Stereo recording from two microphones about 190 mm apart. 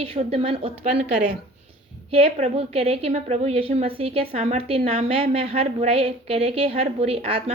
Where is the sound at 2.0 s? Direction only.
30° right (ahead or behind).